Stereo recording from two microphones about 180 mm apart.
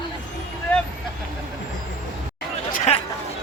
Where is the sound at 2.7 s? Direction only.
35° left (ahead or behind).